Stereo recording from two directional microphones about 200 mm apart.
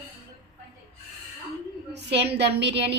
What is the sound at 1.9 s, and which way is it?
A woman's voice, 60° right (ahead or behind).